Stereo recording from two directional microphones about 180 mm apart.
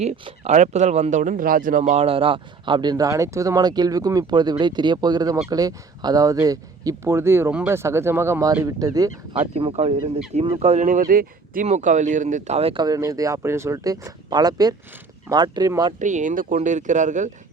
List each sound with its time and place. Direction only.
0.0 s speech: 40° right (ahead or behind); by 9.1 s 20° right (ahead or behind)
9.3 s speech: 35° right (ahead or behind)
16.0 s speech: 45° right (ahead or behind)